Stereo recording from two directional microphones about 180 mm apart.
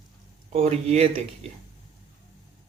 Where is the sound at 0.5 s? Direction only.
35° right (ahead or behind).